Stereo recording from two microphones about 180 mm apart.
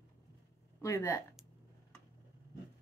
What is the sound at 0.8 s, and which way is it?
Speech, 15° left (ahead or behind).